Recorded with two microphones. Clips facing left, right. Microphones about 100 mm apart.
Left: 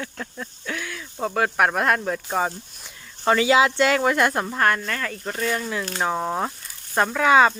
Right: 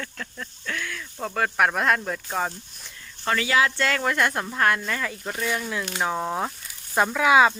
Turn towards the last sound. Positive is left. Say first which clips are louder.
# left 1 dB
turn(degrees=-5)  # may be behind; listen again after turning